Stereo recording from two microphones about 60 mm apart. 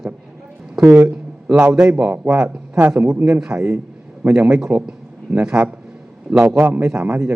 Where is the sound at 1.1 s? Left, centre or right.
Centre.